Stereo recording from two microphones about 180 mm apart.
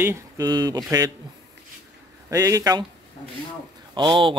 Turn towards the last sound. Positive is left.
turn(degrees=-25)  # may be behind; listen again after turning